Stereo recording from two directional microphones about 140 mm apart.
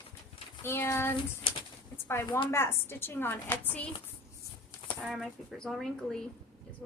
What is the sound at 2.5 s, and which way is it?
A woman's voice, 15° left (ahead or behind).